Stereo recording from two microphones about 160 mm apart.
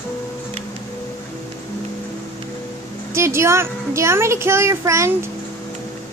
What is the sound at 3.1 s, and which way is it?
A child's voice, 15° right (ahead or behind).